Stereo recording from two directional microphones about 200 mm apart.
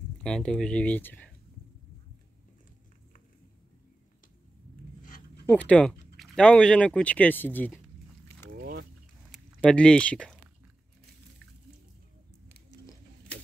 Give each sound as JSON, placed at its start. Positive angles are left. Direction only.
{"t": 0.2, "sound": "speech", "side_deg": 5}
{"t": 5.5, "sound": "speech", "side_deg": 5}
{"t": 8.5, "sound": "a sound", "side_deg": -45}
{"t": 9.3, "sound": "speech", "side_deg": 0}